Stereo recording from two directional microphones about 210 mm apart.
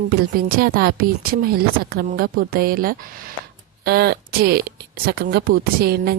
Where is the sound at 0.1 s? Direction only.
45° right (ahead or behind).